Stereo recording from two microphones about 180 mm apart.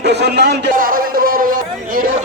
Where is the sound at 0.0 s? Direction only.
70° right (ahead or behind).